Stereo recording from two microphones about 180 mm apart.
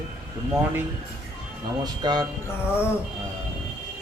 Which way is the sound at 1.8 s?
25° right (ahead or behind).